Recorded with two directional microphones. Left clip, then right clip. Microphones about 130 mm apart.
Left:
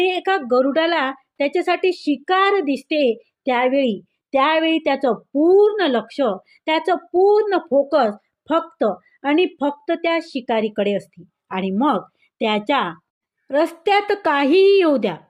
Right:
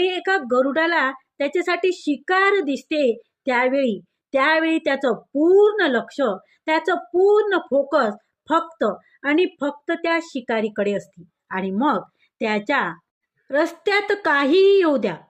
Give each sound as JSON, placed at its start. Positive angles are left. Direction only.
{"t": 0.0, "sound": "speech", "side_deg": 25}